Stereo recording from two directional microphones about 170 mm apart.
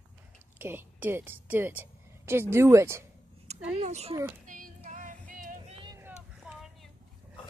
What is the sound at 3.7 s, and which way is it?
Speech, 40° right (ahead or behind).